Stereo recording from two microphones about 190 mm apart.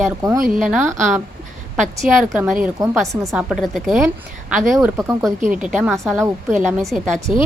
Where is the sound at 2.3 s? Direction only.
5° right (ahead or behind).